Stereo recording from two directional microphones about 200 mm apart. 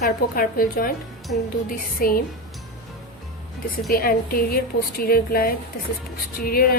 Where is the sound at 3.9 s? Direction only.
45° left (ahead or behind).